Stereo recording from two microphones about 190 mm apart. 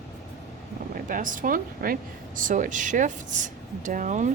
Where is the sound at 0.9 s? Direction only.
45° right (ahead or behind).